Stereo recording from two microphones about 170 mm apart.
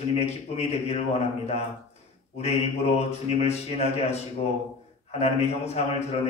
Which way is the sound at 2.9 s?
40° left (ahead or behind).